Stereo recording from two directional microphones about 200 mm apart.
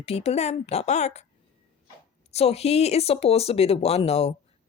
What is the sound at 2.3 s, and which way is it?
Speech, 30° left (ahead or behind).